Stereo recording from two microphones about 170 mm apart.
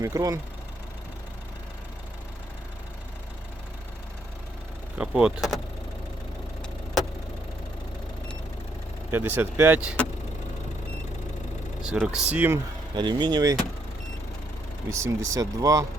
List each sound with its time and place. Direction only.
0.0 s speech: 20° right (ahead or behind)
4.9 s speech: 5° right (ahead or behind)
9.1 s speech: 10° right (ahead or behind)
11.8 s speech: 5° right (ahead or behind)
13.0 s speech: 25° right (ahead or behind)
14.8 s speech: 15° right (ahead or behind)